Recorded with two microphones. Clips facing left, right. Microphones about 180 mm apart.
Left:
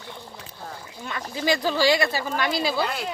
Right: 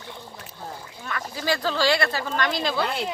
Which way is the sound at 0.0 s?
Centre (ahead or behind).